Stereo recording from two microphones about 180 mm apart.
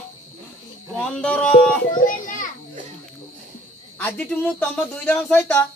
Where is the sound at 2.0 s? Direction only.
50° left (ahead or behind).